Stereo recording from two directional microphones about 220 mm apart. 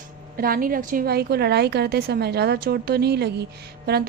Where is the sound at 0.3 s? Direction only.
40° right (ahead or behind).